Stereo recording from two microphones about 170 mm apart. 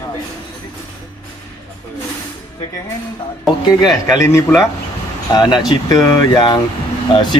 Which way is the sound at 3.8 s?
20° left (ahead or behind).